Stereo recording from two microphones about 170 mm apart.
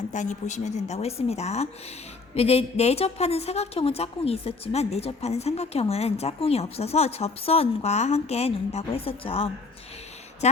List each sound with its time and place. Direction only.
0.1 s a woman's voice: 45° left (ahead or behind)